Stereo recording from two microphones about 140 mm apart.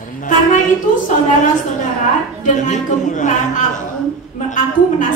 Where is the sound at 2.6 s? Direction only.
60° left (ahead or behind).